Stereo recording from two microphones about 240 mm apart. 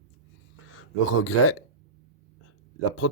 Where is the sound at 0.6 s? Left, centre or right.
Left.